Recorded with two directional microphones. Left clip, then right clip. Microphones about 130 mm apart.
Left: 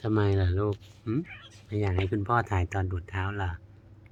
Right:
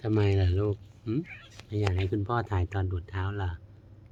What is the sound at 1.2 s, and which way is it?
Speech, centre (ahead or behind).